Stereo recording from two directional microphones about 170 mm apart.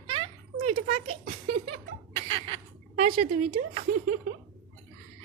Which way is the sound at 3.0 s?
40° right (ahead or behind).